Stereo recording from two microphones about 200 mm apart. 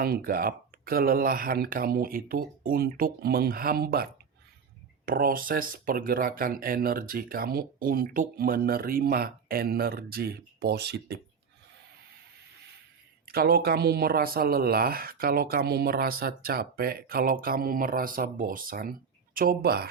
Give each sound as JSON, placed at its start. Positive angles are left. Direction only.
{"t": 0.0, "sound": "speech", "side_deg": -45}
{"t": 13.2, "sound": "speech", "side_deg": -50}